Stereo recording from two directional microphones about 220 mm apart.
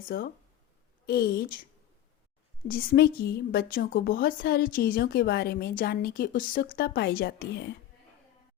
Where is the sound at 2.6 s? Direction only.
40° left (ahead or behind).